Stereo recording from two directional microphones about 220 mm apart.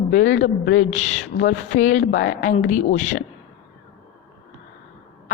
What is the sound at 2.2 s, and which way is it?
Speech, 35° left (ahead or behind).